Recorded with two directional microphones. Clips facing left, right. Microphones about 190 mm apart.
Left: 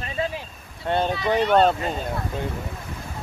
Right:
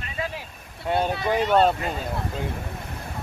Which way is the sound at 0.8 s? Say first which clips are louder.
Left 1 dB; 10° right (ahead or behind).